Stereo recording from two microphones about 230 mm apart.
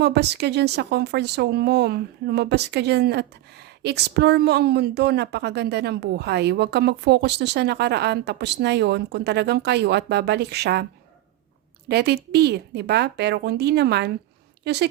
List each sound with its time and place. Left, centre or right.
0.0 s a woman's voice: right
11.9 s a woman's voice: right